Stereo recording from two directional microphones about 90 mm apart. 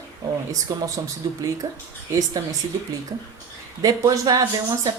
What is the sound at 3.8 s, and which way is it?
Speech, 40° right (ahead or behind).